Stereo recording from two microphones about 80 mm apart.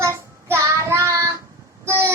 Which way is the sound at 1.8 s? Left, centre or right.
Right.